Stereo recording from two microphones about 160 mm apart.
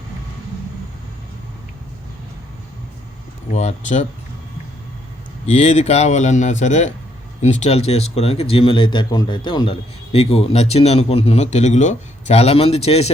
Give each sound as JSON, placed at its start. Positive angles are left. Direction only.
{"t": 3.5, "sound": "speech", "side_deg": 45}
{"t": 5.5, "sound": "speech", "side_deg": 45}